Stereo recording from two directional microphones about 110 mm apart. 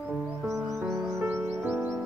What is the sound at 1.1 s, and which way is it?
Music, 20° right (ahead or behind).